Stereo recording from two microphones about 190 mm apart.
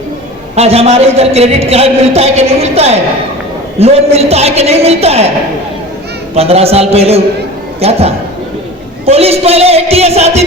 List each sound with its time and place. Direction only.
0.5 s a man's voice: 30° right (ahead or behind)
6.3 s a man's voice: 30° right (ahead or behind)